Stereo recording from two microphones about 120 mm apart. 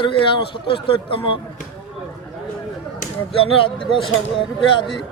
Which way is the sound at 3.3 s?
50° left (ahead or behind).